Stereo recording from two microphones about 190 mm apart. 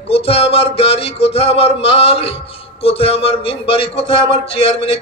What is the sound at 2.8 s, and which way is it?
A man's voice, 30° left (ahead or behind).